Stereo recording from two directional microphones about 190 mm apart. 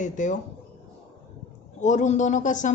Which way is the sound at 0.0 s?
40° left (ahead or behind).